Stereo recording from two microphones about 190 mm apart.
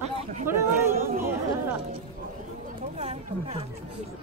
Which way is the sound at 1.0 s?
50° right (ahead or behind).